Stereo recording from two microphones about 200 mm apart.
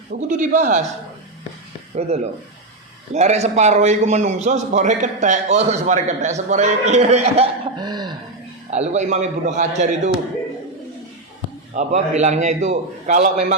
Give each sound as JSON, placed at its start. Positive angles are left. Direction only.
{"t": 0.1, "sound": "a man's voice", "side_deg": -40}
{"t": 2.0, "sound": "a man's voice", "side_deg": -30}
{"t": 8.7, "sound": "a man's voice", "side_deg": -35}
{"t": 11.7, "sound": "a man's voice", "side_deg": -35}